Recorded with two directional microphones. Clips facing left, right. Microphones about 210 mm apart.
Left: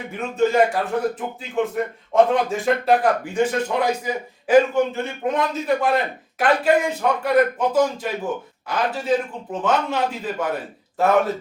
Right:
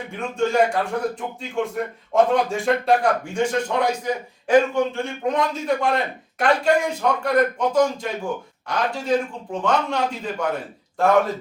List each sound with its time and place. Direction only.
0.2 s speech: 5° left (ahead or behind)